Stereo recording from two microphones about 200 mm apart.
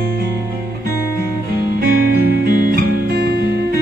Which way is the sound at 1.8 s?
50° right (ahead or behind).